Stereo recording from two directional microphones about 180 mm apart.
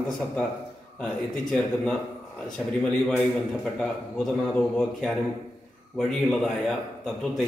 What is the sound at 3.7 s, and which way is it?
A man's voice, 5° left (ahead or behind).